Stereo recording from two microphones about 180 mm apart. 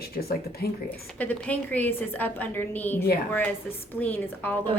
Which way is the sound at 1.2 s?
10° left (ahead or behind).